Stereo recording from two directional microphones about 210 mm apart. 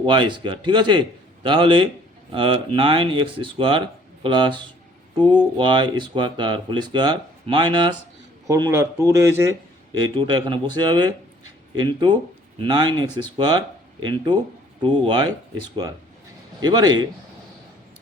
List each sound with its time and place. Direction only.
0.0 s speech: 20° right (ahead or behind)